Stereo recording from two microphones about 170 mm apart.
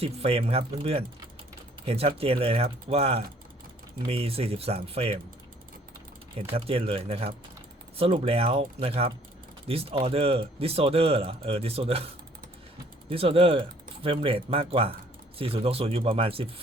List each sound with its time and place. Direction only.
0.0 s speech: 35° right (ahead or behind)
6.5 s speech: 35° right (ahead or behind)
13.1 s speech: 35° right (ahead or behind)